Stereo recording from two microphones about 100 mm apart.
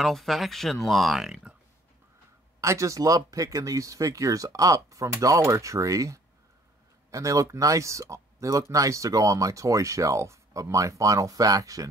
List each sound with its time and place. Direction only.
0.0 s speech: centre (ahead or behind)
2.6 s speech: 30° right (ahead or behind)